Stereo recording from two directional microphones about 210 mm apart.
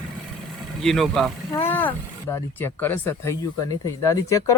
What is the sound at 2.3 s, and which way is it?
Speech, 10° left (ahead or behind).